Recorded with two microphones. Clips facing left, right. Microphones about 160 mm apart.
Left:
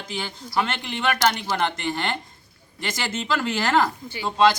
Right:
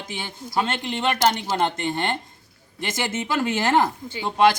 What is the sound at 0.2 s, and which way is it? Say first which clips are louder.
Speech: even; 20° right (ahead or behind).